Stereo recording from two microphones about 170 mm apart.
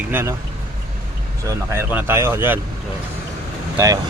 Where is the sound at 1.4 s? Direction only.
15° right (ahead or behind).